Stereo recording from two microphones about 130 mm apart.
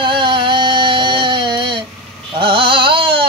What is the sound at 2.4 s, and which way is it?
Carnatic music, 40° right (ahead or behind).